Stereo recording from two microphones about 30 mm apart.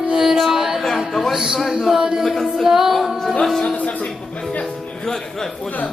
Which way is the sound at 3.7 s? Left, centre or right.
Left.